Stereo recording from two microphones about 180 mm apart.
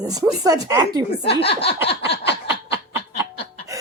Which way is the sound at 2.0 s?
70° left (ahead or behind).